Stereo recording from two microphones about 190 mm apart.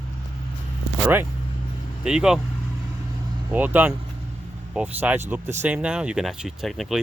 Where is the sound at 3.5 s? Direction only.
10° right (ahead or behind).